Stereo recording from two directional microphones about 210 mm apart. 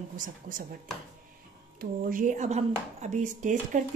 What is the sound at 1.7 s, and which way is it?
Speech, 40° right (ahead or behind).